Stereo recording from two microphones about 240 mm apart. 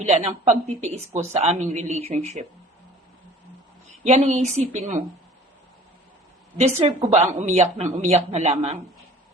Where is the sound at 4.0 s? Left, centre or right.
Right.